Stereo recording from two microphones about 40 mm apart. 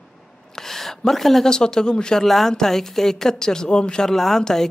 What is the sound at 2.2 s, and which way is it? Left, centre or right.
Speech, centre.